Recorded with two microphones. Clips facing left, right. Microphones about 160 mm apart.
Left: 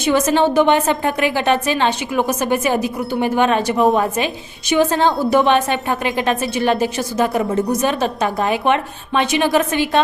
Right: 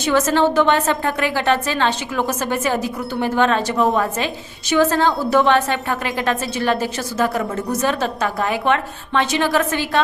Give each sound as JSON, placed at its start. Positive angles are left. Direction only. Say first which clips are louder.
{"t": 0.0, "sound": "a woman's voice", "louder": "left 1 dB", "side_deg": 15}